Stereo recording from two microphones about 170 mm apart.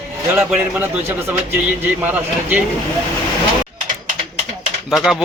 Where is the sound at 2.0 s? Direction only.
10° right (ahead or behind).